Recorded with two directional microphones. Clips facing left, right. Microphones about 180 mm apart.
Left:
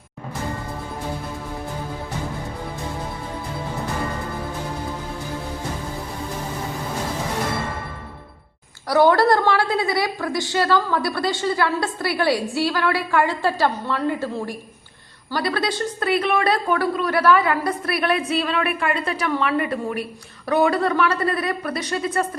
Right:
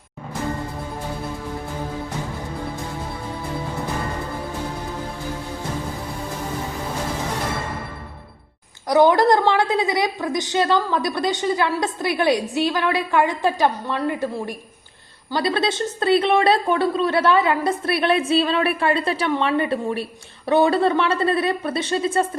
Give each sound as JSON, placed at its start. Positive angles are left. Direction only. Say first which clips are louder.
{"t": 8.9, "sound": "a woman's voice", "louder": "right 1 dB", "side_deg": -20}